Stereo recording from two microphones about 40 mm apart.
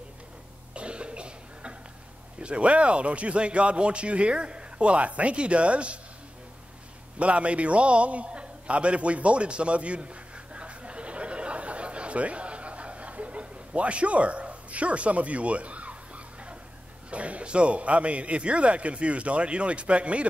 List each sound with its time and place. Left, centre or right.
0.7 s cough: right
2.4 s a man's voice: right
7.2 s a sound: right
17.1 s a man's voice: right